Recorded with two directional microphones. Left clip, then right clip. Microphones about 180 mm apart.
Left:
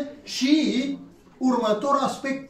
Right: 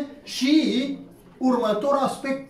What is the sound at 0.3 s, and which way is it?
Speech, 5° right (ahead or behind).